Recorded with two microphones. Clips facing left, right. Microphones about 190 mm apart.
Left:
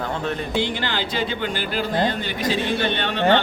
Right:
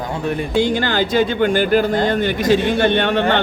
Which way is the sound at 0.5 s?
45° right (ahead or behind).